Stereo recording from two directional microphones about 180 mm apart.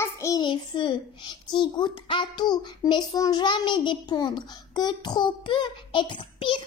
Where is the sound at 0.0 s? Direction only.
15° left (ahead or behind).